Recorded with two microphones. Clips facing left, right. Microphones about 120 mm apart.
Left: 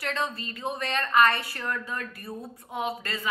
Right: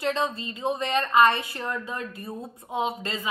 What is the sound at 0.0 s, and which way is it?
A woman's voice, 20° right (ahead or behind).